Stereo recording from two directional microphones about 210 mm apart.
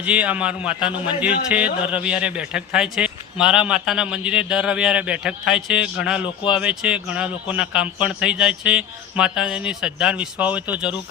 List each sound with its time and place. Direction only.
0.0 s a man's voice: 5° right (ahead or behind)